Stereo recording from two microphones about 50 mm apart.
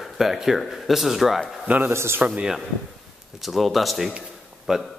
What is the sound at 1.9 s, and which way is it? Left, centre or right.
Speech, right.